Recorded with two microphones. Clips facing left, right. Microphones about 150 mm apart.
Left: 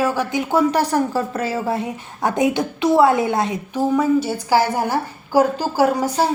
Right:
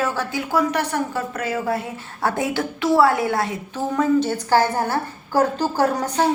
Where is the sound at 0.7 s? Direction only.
35° left (ahead or behind).